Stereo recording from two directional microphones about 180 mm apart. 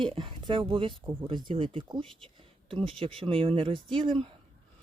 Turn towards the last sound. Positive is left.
turn(degrees=-30)  # may be behind; listen again after turning